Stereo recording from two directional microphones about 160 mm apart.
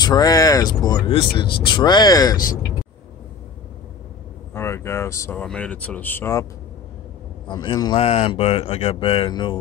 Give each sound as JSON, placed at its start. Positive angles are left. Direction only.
{"t": 0.0, "sound": "speech", "side_deg": 25}
{"t": 4.6, "sound": "speech", "side_deg": 15}
{"t": 7.4, "sound": "speech", "side_deg": 25}
{"t": 8.0, "sound": "mantra", "side_deg": 40}